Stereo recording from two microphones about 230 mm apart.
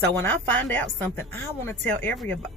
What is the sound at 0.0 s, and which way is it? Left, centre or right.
Speech, centre.